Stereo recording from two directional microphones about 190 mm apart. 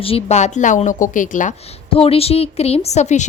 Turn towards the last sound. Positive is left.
turn(degrees=35)  # may be behind; listen again after turning